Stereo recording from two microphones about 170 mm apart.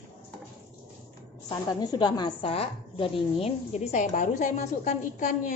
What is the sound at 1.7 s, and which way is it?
A woman's voice, 25° left (ahead or behind).